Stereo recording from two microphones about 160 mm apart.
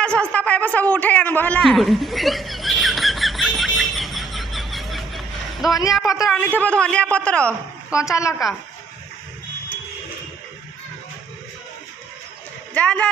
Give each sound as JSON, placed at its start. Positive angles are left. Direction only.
{"t": 0.0, "sound": "a sound", "side_deg": 5}
{"t": 5.9, "sound": "a woman's voice", "side_deg": 0}
{"t": 8.0, "sound": "a woman's voice", "side_deg": 20}
{"t": 12.7, "sound": "a man's voice", "side_deg": 10}